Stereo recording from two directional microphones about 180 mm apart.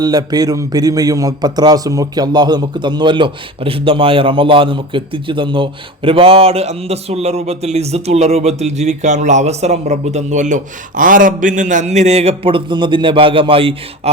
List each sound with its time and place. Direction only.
0.0 s a man's voice: 20° right (ahead or behind)